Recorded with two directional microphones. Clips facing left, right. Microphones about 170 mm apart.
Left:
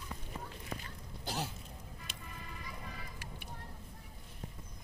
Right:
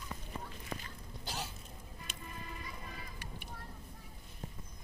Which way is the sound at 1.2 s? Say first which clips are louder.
Left 4 dB; 60° left (ahead or behind).